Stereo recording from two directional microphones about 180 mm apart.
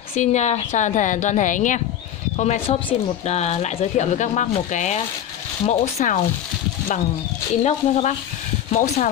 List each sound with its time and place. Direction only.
0.1 s speech: 40° left (ahead or behind)
7.6 s speech: 40° left (ahead or behind)